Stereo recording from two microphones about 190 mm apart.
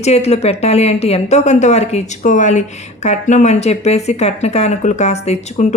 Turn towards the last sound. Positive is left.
turn(degrees=35)  # may be behind; listen again after turning